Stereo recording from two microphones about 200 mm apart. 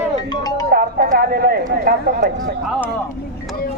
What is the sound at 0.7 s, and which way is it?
Speech, 50° right (ahead or behind).